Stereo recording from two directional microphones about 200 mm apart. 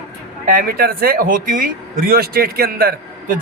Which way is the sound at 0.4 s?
45° right (ahead or behind).